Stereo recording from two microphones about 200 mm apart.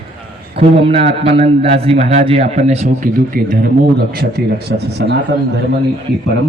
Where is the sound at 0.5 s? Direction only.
30° right (ahead or behind); by 5.1 s 55° right (ahead or behind).